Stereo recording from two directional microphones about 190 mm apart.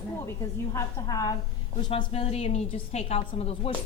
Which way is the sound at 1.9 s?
30° left (ahead or behind).